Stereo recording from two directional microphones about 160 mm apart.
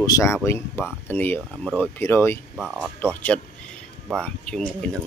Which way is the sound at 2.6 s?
5° right (ahead or behind).